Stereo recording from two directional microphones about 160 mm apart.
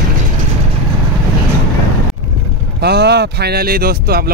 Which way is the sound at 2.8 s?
90° right.